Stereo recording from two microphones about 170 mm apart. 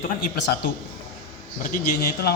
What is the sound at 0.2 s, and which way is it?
Speech, 90° left.